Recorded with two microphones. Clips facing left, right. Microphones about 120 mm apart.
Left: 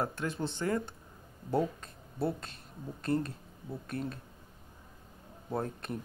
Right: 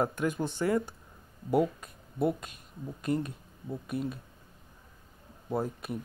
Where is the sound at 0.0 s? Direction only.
15° right (ahead or behind).